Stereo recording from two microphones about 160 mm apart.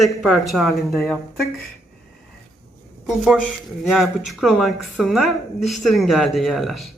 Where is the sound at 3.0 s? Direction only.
5° right (ahead or behind).